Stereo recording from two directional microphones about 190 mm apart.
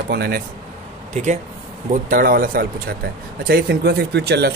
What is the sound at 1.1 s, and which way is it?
Speech, 40° right (ahead or behind).